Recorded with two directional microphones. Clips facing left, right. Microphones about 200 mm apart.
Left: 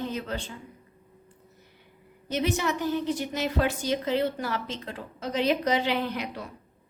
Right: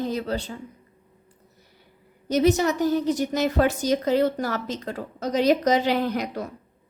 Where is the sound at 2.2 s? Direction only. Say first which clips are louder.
Right 7 dB; 40° right (ahead or behind).